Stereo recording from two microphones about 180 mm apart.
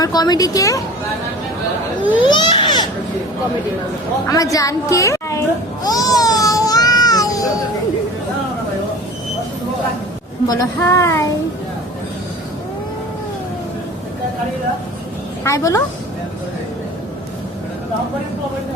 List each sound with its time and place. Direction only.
0.0 s a woman's voice: 20° left (ahead or behind)
2.2 s baby cry: 25° left (ahead or behind)
4.3 s a woman's voice: 20° left (ahead or behind)
5.8 s a sound: 20° left (ahead or behind)
10.4 s a woman's voice: 20° left (ahead or behind)
15.4 s a woman's voice: 15° left (ahead or behind)